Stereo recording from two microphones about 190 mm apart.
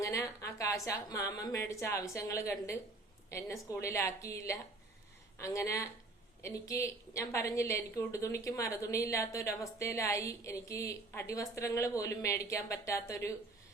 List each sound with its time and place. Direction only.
0.0 s a woman's voice: 15° left (ahead or behind)